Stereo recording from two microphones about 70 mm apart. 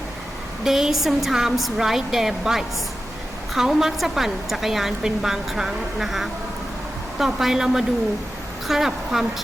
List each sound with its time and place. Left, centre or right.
0.6 s a woman's voice: centre